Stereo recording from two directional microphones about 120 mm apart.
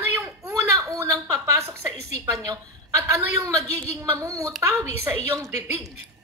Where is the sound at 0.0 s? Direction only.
25° right (ahead or behind).